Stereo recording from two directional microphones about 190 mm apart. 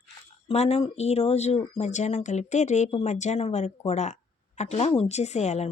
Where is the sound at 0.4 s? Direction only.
35° left (ahead or behind).